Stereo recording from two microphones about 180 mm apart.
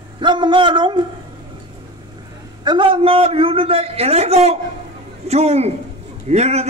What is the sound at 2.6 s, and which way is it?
A man's voice, 25° right (ahead or behind).